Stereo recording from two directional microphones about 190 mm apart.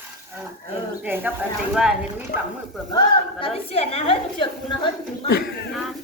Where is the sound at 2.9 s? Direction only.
30° left (ahead or behind).